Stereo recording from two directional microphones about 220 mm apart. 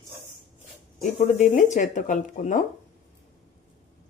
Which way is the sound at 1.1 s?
30° left (ahead or behind).